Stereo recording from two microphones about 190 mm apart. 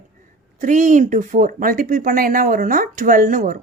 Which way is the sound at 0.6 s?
40° right (ahead or behind).